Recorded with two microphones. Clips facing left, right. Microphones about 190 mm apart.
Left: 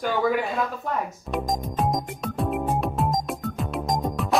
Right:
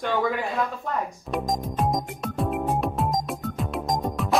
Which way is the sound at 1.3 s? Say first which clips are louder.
Even; centre (ahead or behind).